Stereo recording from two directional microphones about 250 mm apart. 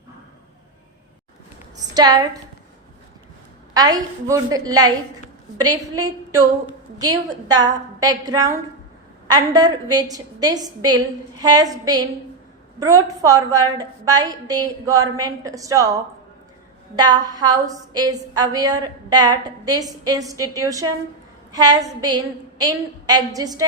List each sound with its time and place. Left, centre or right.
1.9 s a woman's voice: centre
3.8 s a woman's voice: centre
13.2 s a woman's voice: centre